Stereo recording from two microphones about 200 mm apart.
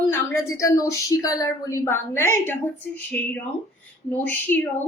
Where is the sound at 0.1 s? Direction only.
15° left (ahead or behind).